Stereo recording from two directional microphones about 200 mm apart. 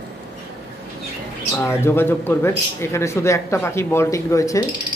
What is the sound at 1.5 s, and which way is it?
Speech, 10° left (ahead or behind).